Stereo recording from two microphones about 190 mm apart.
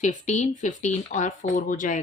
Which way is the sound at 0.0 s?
40° left (ahead or behind).